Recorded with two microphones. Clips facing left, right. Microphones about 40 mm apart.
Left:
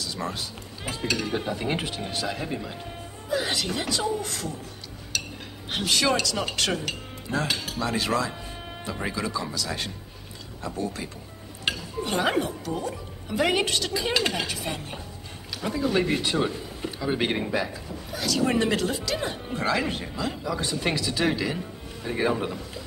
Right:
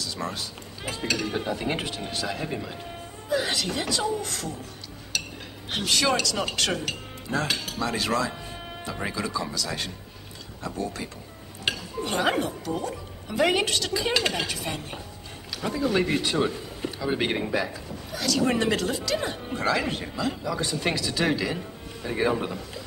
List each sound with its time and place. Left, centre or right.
0.0 s speech: centre
5.1 s dishes: centre
5.7 s speech: centre
10.6 s speech: centre
18.1 s speech: centre
18.4 s speech: centre
20.9 s speech: centre
21.2 s a man's voice: centre